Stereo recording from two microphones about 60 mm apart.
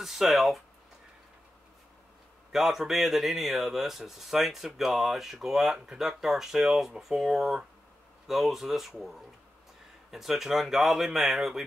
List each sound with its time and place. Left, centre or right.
0.0 s speech: centre
2.5 s speech: centre
10.1 s speech: centre